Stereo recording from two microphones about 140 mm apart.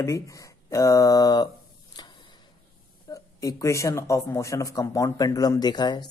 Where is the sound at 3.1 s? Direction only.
20° left (ahead or behind).